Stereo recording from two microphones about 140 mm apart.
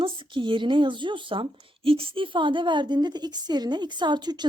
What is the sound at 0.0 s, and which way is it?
A woman's voice, 35° right (ahead or behind).